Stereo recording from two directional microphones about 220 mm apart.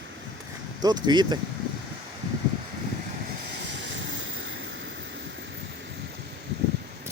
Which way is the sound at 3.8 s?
55° right (ahead or behind).